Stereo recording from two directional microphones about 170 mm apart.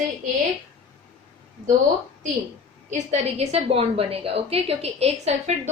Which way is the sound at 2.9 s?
40° right (ahead or behind).